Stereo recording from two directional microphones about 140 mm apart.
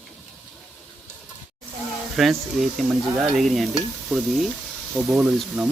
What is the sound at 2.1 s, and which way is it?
Stir, centre (ahead or behind).